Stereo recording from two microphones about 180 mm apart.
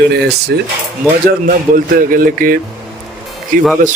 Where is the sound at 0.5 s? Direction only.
70° right (ahead or behind).